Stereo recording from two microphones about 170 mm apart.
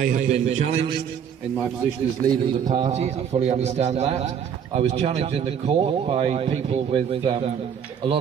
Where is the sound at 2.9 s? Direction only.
40° right (ahead or behind).